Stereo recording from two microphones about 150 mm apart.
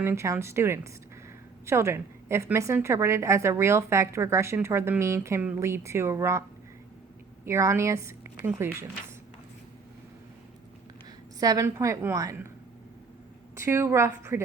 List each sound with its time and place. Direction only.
0.0 s a woman's voice: 15° right (ahead or behind)
7.4 s speech: 20° right (ahead or behind)
11.3 s speech: 25° right (ahead or behind)
13.6 s a woman's voice: 15° right (ahead or behind)